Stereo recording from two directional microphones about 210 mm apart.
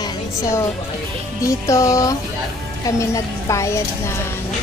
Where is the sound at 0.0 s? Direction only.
15° left (ahead or behind).